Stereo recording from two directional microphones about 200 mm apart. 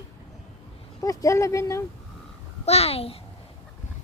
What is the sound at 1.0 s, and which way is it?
Speech, 15° left (ahead or behind).